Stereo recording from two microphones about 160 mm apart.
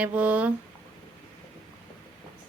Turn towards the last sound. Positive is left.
turn(degrees=-10)  # may be behind; listen again after turning